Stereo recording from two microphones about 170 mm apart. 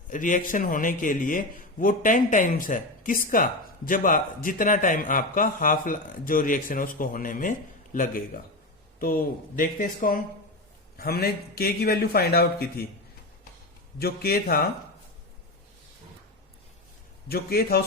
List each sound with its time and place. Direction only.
0.1 s a man's voice: 50° left (ahead or behind)
10.9 s a man's voice: 65° left (ahead or behind)
14.0 s a man's voice: 65° left (ahead or behind)
17.2 s a man's voice: 65° left (ahead or behind)